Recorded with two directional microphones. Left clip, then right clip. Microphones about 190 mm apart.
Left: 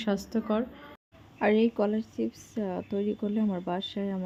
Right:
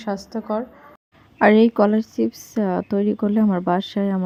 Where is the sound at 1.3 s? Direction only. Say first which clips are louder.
Right 10 dB; 35° right (ahead or behind).